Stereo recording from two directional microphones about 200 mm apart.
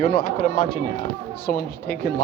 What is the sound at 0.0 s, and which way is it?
Speech, 45° left (ahead or behind).